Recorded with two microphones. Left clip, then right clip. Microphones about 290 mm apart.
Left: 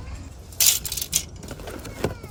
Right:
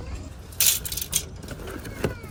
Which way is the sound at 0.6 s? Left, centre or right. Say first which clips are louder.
Left 3 dB; centre.